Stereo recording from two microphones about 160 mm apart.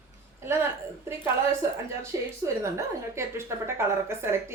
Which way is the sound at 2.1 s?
20° right (ahead or behind).